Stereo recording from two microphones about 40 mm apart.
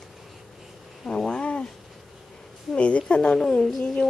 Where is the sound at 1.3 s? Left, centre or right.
Left.